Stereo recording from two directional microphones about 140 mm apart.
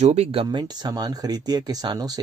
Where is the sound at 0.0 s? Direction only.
50° right (ahead or behind).